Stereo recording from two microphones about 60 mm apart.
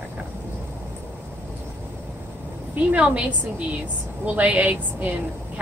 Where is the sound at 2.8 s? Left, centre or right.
Right.